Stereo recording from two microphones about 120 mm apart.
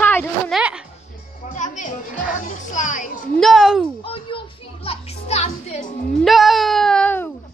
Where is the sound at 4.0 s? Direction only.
45° left (ahead or behind); by 5.7 s 60° left (ahead or behind).